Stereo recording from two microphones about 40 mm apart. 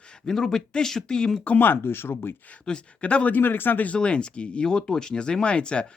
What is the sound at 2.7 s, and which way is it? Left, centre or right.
Speech, left.